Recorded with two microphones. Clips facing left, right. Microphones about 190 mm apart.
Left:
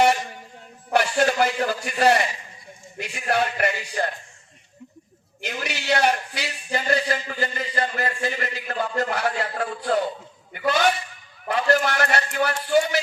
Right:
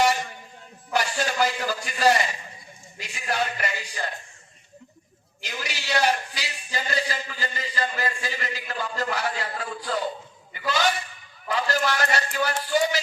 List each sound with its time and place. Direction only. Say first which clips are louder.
0.9 s a man's voice: left 6 dB; 60° left (ahead or behind)
5.4 s a man's voice: left 4 dB; 60° left (ahead or behind)